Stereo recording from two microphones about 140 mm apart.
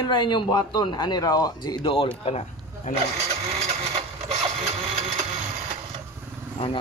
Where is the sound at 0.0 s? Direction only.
30° left (ahead or behind).